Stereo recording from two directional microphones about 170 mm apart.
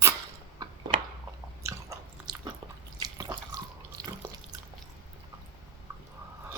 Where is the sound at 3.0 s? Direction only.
20° right (ahead or behind).